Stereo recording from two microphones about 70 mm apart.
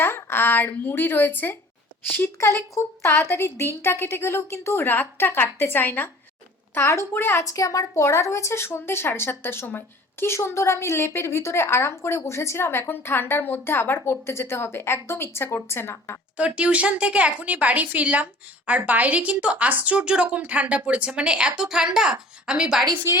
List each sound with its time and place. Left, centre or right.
0.0 s a woman's voice: left
6.7 s a woman's voice: left
7.4 s a woman's voice: left
16.4 s a woman's voice: centre